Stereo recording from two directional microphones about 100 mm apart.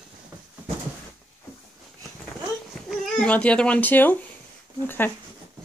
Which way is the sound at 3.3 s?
10° left (ahead or behind).